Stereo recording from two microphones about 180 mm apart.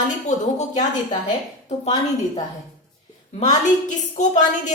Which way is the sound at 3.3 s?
40° left (ahead or behind).